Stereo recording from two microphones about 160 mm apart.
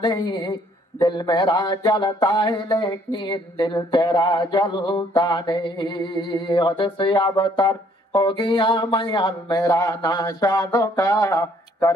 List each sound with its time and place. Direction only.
0.0 s a man's voice: 30° left (ahead or behind)